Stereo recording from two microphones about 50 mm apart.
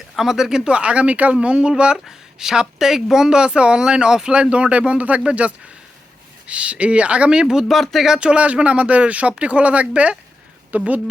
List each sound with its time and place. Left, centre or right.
0.2 s speech: centre
7.7 s speech: centre
8.2 s speech: right